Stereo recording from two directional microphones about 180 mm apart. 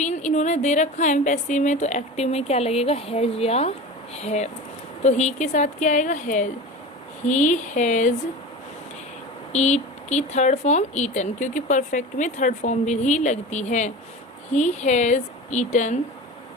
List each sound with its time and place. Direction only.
0.0 s a woman's voice: 40° left (ahead or behind)
9.5 s speech: 40° left (ahead or behind)